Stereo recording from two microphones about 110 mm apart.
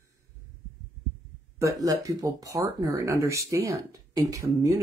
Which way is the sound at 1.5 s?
30° right (ahead or behind).